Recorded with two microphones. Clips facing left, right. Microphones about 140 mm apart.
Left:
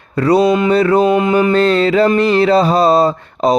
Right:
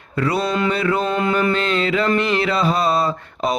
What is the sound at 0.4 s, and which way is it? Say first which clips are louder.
Mantra: left 8 dB; 20° left (ahead or behind).